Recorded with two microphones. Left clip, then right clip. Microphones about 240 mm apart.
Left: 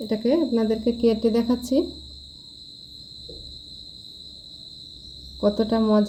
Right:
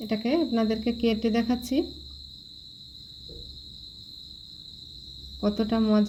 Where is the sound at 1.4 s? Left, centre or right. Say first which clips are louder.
Left 5 dB; right.